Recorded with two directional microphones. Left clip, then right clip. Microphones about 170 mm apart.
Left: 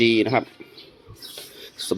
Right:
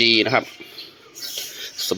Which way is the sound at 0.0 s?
10° left (ahead or behind).